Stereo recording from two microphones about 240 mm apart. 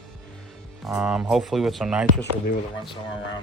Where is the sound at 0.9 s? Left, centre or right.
Centre.